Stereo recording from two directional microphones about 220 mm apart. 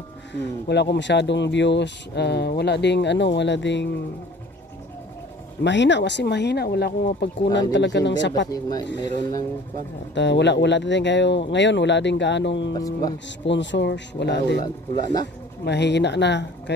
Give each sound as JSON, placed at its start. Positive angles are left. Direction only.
{"t": 0.3, "sound": "speech", "side_deg": 50}
{"t": 5.6, "sound": "speech", "side_deg": 55}
{"t": 8.5, "sound": "speech", "side_deg": 15}
{"t": 10.1, "sound": "speech", "side_deg": 55}
{"t": 12.7, "sound": "speech", "side_deg": 15}
{"t": 13.5, "sound": "speech", "side_deg": 55}
{"t": 14.6, "sound": "speech", "side_deg": 20}
{"t": 15.6, "sound": "speech", "side_deg": 50}